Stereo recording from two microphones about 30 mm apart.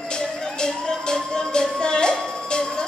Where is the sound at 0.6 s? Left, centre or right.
Left.